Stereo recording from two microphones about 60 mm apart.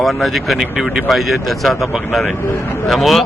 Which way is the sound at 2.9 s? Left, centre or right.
Centre.